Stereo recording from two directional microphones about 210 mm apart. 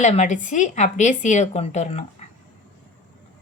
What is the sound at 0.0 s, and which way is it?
A woman's voice, 35° left (ahead or behind).